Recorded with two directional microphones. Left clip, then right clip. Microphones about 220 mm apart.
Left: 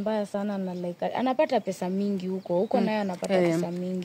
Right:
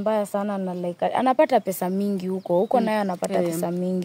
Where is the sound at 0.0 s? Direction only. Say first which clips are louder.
Right 5 dB; 50° right (ahead or behind).